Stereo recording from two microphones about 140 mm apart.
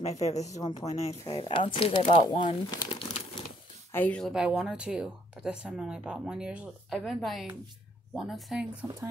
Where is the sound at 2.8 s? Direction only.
40° left (ahead or behind).